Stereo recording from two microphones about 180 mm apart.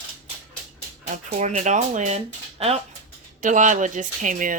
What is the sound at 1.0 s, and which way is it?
Speech, 40° right (ahead or behind).